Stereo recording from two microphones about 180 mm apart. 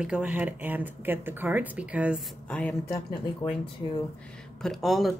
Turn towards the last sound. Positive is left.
turn(degrees=0)  # may be behind; listen again after turning